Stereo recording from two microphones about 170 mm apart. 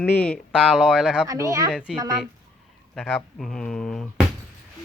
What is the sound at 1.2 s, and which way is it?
Speech, 20° right (ahead or behind).